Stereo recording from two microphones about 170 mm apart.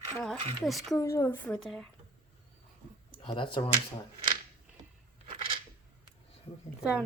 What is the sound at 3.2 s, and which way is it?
Speech, 30° left (ahead or behind).